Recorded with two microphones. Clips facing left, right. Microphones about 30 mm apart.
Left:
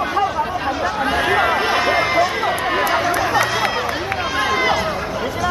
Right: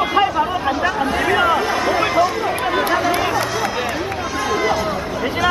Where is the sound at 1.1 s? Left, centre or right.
Left.